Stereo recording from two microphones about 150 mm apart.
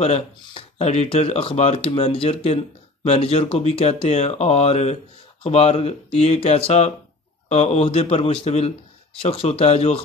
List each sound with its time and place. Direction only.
0.0 s speech: 40° left (ahead or behind)